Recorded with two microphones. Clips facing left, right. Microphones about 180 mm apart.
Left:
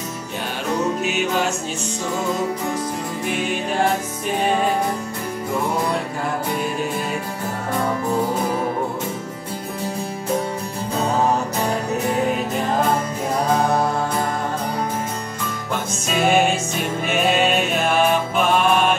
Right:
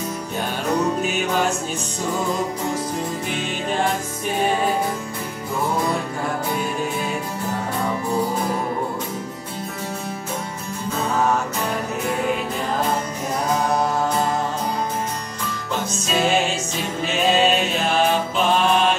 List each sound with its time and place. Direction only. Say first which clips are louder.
15.7 s music: right 1 dB; 55° left (ahead or behind)